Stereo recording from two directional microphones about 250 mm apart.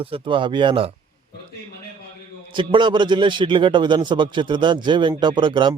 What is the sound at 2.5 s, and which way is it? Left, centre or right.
Speech, centre.